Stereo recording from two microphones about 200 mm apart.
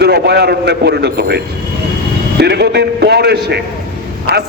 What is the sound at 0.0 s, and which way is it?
A man's voice, 55° right (ahead or behind).